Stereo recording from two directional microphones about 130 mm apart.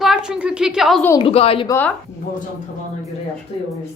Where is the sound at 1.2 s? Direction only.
50° left (ahead or behind).